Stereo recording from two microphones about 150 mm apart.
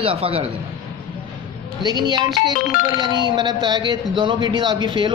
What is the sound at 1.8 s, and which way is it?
Speech, 30° right (ahead or behind).